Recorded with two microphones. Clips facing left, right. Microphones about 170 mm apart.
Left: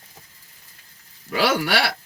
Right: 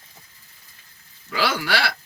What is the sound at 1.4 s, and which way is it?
Speech, 20° left (ahead or behind).